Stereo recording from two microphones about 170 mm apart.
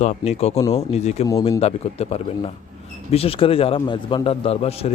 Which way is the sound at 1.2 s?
20° left (ahead or behind).